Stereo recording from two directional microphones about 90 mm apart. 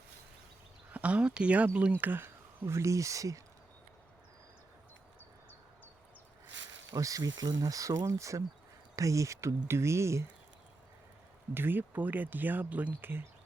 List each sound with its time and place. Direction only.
0.9 s speech: 15° right (ahead or behind); by 3.4 s 40° right (ahead or behind)
6.9 s speech: 40° right (ahead or behind)
11.5 s speech: 25° right (ahead or behind)